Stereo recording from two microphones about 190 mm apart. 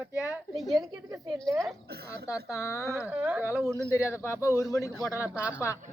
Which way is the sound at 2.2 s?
15° left (ahead or behind).